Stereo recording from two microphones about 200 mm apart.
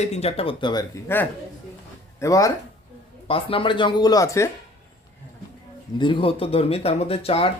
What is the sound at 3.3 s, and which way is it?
Speech, 25° left (ahead or behind).